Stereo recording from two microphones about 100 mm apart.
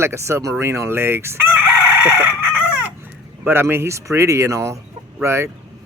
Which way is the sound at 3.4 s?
20° right (ahead or behind).